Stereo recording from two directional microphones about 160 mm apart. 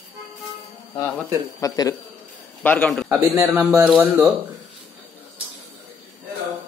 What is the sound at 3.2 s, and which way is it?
Speech, 15° right (ahead or behind).